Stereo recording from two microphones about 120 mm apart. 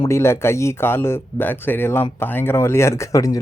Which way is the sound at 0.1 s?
20° left (ahead or behind).